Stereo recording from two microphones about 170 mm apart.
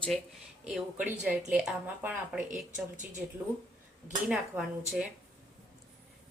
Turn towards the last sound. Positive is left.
turn(degrees=-5)  # may be behind; listen again after turning